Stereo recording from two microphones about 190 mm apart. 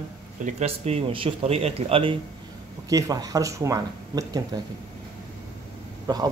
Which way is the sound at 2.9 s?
20° right (ahead or behind).